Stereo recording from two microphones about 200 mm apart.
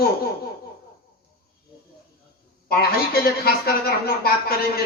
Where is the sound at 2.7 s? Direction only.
50° left (ahead or behind).